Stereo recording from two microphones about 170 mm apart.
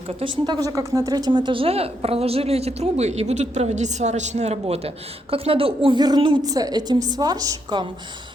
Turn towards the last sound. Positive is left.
turn(degrees=-25)  # may be behind; listen again after turning